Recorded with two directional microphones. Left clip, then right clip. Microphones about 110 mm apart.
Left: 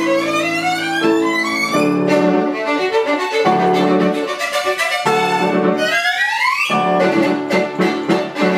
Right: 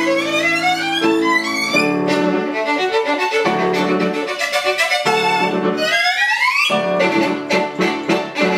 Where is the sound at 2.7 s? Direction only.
25° right (ahead or behind).